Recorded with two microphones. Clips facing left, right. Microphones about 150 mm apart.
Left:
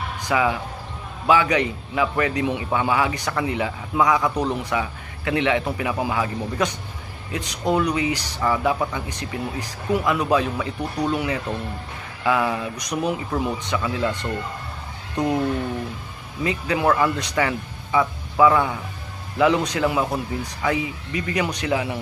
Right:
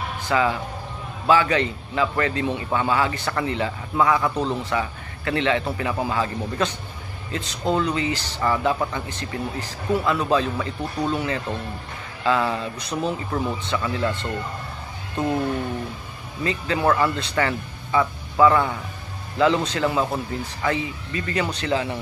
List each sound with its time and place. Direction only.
0.2 s a man's voice: 15° left (ahead or behind)
16.4 s a man's voice: 15° left (ahead or behind)